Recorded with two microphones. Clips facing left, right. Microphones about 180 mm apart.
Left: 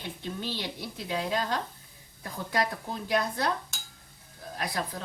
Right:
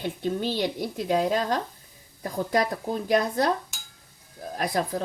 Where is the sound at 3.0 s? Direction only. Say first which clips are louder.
Right 5 dB; 45° right (ahead or behind).